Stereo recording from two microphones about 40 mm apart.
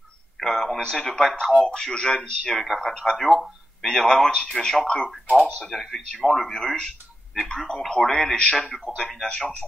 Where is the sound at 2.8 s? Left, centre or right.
Centre.